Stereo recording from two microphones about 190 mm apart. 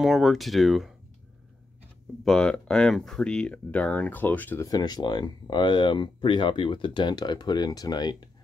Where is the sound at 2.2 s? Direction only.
5° left (ahead or behind); by 8.3 s 20° left (ahead or behind).